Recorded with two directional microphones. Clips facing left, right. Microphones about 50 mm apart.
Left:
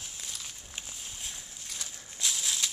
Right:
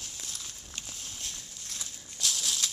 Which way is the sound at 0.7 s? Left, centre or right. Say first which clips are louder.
Right 1 dB; centre.